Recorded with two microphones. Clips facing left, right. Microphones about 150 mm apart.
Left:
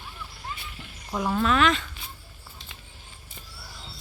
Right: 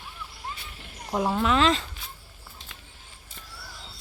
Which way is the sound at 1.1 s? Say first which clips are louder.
Right 1 dB; 20° right (ahead or behind).